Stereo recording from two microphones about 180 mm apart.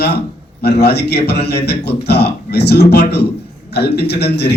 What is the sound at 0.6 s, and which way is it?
A man's voice, 65° left (ahead or behind).